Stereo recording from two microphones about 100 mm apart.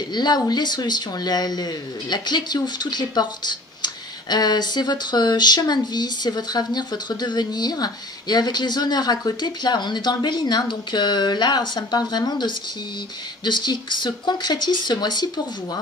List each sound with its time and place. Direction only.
0.1 s speech: 45° left (ahead or behind)